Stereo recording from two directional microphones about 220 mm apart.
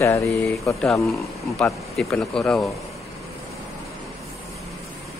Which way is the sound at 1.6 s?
5° left (ahead or behind).